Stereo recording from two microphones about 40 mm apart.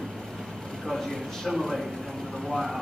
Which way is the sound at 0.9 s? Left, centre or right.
Centre.